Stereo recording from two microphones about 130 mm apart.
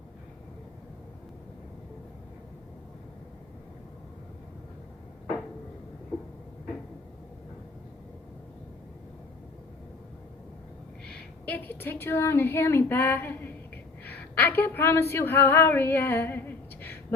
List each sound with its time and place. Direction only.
11.4 s a woman's voice: 15° left (ahead or behind)